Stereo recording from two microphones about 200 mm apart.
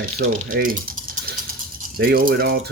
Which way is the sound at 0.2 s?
45° right (ahead or behind).